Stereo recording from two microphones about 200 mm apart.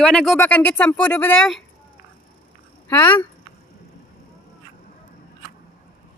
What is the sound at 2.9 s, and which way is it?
Speech, 10° left (ahead or behind).